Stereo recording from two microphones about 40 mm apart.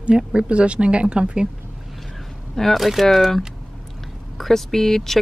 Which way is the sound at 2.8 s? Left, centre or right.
Centre.